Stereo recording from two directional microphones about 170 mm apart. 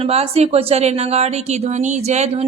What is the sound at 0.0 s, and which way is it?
Speech, 35° right (ahead or behind).